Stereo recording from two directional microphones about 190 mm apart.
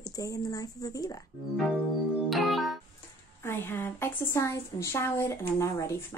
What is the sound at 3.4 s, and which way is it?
A woman's voice, 10° left (ahead or behind).